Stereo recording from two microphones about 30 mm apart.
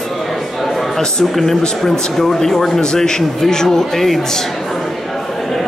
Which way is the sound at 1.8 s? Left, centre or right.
Centre.